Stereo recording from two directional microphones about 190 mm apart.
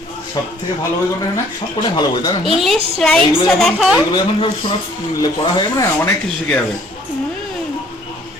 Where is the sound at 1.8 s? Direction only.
20° left (ahead or behind).